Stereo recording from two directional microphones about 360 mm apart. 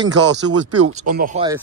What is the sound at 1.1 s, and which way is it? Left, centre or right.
Speech, right.